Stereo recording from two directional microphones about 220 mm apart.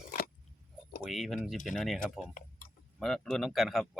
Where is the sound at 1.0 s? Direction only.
Centre (ahead or behind).